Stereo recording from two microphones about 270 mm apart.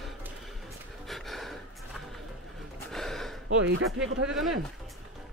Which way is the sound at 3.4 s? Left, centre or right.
Right.